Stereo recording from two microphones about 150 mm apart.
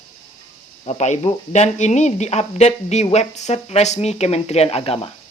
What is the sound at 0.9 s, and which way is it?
Speech, 50° left (ahead or behind).